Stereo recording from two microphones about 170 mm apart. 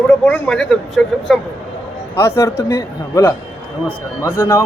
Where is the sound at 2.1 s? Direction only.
15° left (ahead or behind).